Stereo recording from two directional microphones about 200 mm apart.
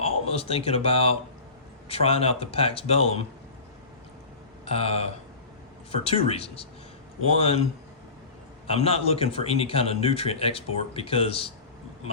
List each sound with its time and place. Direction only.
0.0 s a man's voice: 30° left (ahead or behind)
4.6 s a man's voice: 30° left (ahead or behind)
8.6 s a man's voice: 30° left (ahead or behind)